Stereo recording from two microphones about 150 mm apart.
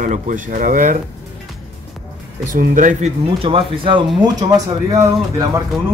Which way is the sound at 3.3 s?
40° right (ahead or behind).